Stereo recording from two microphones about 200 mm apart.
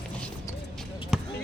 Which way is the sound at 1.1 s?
Centre (ahead or behind).